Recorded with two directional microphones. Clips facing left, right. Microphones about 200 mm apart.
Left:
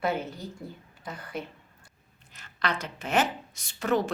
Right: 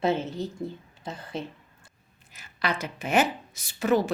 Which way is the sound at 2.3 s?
10° right (ahead or behind).